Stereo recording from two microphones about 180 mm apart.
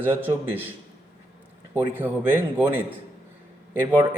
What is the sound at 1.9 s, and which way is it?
Speech, 10° right (ahead or behind).